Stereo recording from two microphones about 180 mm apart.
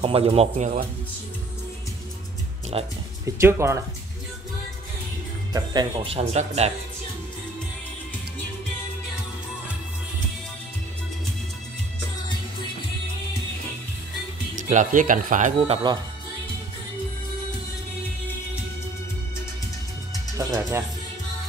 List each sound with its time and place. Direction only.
0.0 s speech: 30° right (ahead or behind)
2.7 s speech: 30° right (ahead or behind)
3.3 s speech: 15° right (ahead or behind)
5.5 s speech: 25° right (ahead or behind)
14.5 s speech: 45° right (ahead or behind)
15.6 s speech: 30° right (ahead or behind)
20.3 s speech: 15° right (ahead or behind)